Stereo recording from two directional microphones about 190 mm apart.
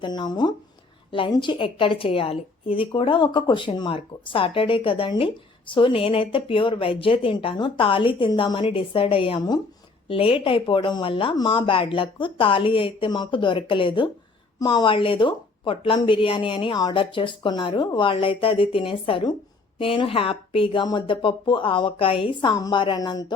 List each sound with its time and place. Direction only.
0.0 s a woman's voice: 20° left (ahead or behind)